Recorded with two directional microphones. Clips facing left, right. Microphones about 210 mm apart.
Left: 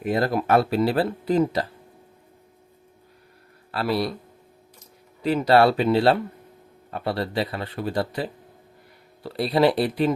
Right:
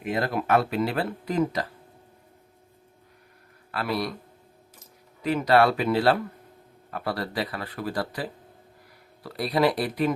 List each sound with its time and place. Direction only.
0.0 s speech: 40° left (ahead or behind)
3.7 s speech: 30° left (ahead or behind)
5.2 s speech: 30° left (ahead or behind)